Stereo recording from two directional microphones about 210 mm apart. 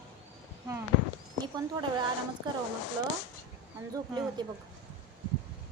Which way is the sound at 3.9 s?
20° right (ahead or behind).